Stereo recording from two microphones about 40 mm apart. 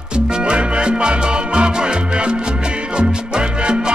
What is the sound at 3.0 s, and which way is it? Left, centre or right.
Salsa music, right.